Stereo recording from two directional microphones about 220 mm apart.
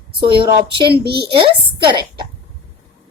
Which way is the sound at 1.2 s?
25° right (ahead or behind).